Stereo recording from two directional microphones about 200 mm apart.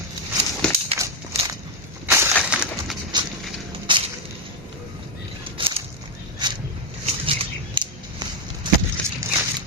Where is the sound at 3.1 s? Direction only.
20° right (ahead or behind).